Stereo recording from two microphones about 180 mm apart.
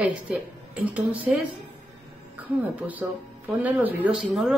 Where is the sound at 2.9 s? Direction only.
10° right (ahead or behind).